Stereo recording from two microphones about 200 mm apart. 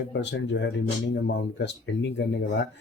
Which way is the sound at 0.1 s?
60° left (ahead or behind).